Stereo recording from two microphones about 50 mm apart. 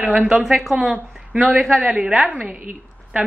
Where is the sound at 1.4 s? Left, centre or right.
Centre.